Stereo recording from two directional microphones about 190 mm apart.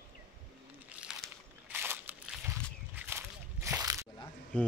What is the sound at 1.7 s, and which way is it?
Crunch, 10° right (ahead or behind).